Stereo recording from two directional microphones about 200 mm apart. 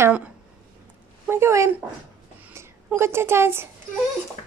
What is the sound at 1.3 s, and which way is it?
Speech, 15° right (ahead or behind).